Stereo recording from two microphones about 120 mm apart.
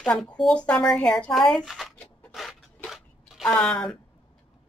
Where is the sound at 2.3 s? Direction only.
Centre (ahead or behind).